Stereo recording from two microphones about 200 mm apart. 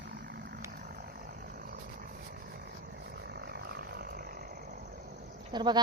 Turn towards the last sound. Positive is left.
turn(degrees=-20)  # may be behind; listen again after turning